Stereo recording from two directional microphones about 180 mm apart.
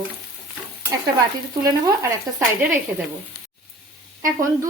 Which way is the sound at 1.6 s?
20° right (ahead or behind).